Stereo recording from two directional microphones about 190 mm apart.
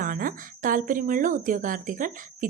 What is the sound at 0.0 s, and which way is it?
Speech, 45° right (ahead or behind).